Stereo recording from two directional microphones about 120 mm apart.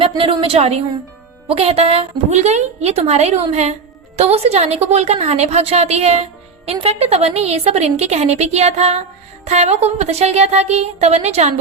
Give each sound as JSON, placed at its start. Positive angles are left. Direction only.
{"t": 0.2, "sound": "a woman's voice", "side_deg": -50}